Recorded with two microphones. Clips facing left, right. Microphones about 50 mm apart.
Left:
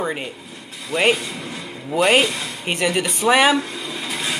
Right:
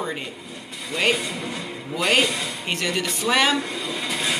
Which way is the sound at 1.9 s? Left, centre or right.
Left.